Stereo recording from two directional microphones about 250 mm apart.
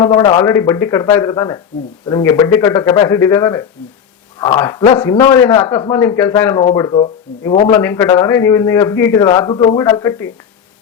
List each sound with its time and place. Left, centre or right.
0.0 s a man's voice: centre
7.7 s a man's voice: centre